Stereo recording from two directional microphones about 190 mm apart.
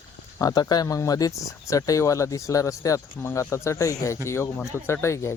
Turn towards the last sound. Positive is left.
turn(degrees=15)  # may be behind; listen again after turning